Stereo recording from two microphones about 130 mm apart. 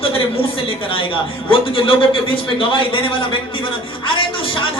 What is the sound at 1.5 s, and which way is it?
Speech, 45° left (ahead or behind).